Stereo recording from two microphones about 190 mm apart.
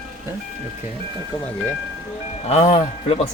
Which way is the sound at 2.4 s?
35° left (ahead or behind).